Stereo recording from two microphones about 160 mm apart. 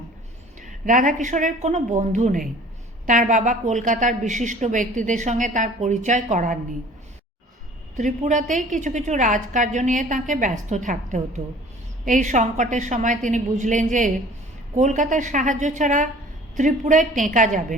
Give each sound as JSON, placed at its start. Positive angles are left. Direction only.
{"t": 0.6, "sound": "a woman's voice", "side_deg": -55}
{"t": 7.9, "sound": "a woman's voice", "side_deg": -50}